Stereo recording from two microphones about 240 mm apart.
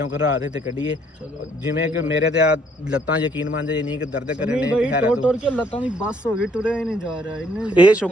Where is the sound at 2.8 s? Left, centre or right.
Centre.